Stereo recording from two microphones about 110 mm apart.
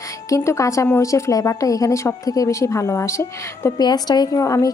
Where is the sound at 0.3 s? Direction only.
30° left (ahead or behind).